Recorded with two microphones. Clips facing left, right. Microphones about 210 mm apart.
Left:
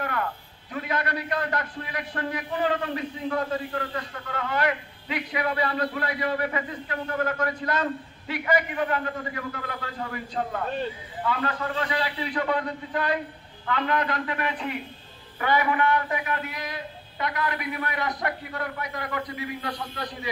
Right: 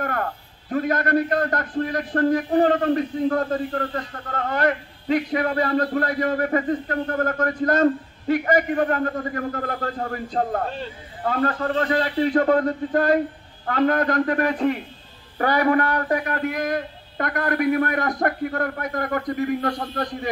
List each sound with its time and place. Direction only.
0.0 s a man's voice: 45° right (ahead or behind)